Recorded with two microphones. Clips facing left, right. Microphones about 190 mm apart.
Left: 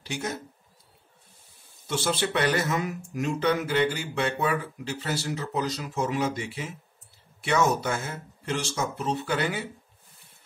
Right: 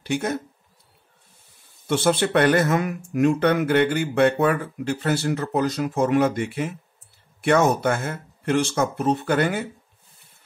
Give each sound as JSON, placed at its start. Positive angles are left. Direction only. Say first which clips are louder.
{"t": 0.0, "sound": "speech", "louder": "right 8 dB", "side_deg": -55}
{"t": 1.9, "sound": "speech", "louder": "right 7 dB", "side_deg": -55}